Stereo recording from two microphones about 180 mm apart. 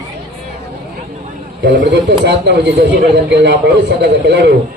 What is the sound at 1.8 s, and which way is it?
Speech, 75° right (ahead or behind).